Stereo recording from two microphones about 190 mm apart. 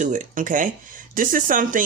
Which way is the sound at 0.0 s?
40° right (ahead or behind).